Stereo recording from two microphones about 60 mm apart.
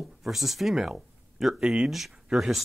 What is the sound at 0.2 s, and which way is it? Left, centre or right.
Speech, centre.